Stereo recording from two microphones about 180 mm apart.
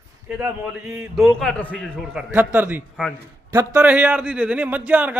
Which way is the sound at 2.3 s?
10° right (ahead or behind).